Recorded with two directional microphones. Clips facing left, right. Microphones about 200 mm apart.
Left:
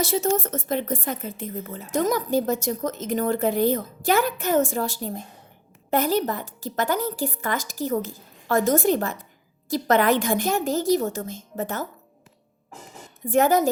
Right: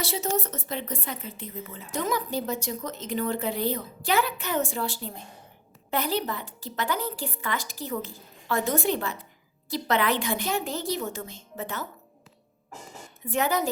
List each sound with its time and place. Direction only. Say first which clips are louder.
0.0 s speech: left 6 dB; 50° left (ahead or behind)
13.2 s speech: left 7 dB; 45° left (ahead or behind)